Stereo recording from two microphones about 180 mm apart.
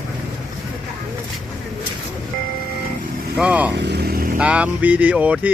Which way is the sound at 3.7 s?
70° right (ahead or behind).